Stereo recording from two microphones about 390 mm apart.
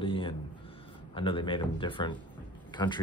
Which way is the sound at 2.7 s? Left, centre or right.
Centre.